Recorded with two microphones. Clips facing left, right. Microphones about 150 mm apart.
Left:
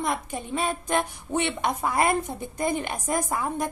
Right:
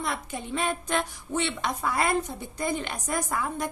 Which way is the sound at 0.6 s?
40° left (ahead or behind).